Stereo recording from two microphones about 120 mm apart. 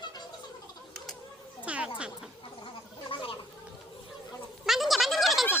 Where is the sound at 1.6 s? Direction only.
10° right (ahead or behind).